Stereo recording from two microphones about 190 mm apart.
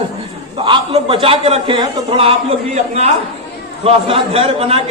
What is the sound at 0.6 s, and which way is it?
A man's voice, 30° right (ahead or behind).